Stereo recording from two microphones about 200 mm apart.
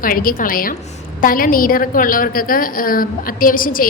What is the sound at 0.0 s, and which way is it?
A woman's voice, 45° left (ahead or behind).